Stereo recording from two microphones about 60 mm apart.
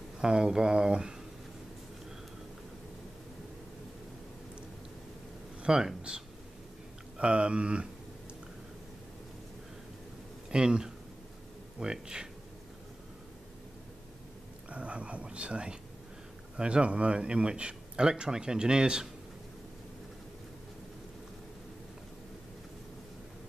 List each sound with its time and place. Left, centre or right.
0.2 s speech: centre
5.6 s speech: centre
10.5 s speech: centre
14.7 s speech: right